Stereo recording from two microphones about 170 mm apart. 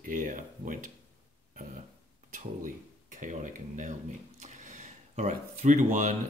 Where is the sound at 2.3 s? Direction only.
50° right (ahead or behind).